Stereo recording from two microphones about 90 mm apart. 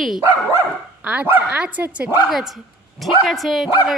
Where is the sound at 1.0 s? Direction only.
20° right (ahead or behind).